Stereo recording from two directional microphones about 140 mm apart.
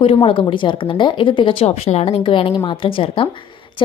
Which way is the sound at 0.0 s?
40° left (ahead or behind).